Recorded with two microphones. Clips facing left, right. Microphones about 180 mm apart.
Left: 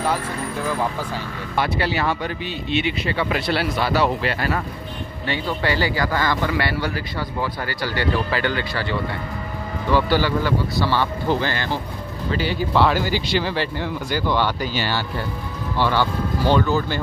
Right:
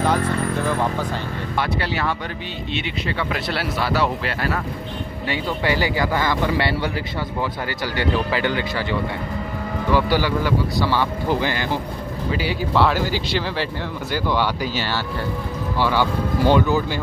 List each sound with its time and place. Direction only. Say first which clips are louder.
1.6 s speech: left 2 dB; 5° left (ahead or behind)
5.3 s speech: even; 15° right (ahead or behind)
9.9 s speech: left 1 dB; 10° right (ahead or behind)
15.8 s speech: even; 10° right (ahead or behind)